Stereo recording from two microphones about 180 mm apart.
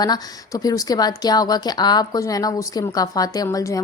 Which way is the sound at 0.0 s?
20° left (ahead or behind).